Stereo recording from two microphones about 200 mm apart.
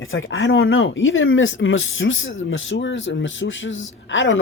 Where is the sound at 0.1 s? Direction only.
75° left (ahead or behind).